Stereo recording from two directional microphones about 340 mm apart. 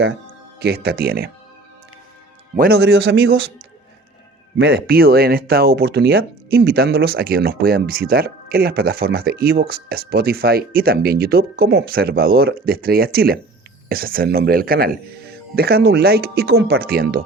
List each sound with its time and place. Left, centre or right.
0.6 s speech: right
2.6 s speech: right
4.5 s speech: right